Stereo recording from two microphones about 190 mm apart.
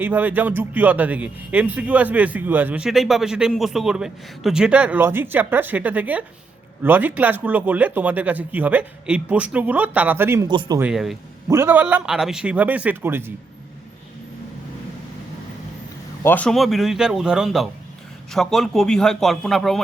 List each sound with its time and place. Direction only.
0.0 s a man's voice: 10° right (ahead or behind)
10.5 s speech: 25° right (ahead or behind)
10.8 s a man's voice: 5° right (ahead or behind)
11.4 s a man's voice: 15° right (ahead or behind)
16.2 s a man's voice: 10° left (ahead or behind)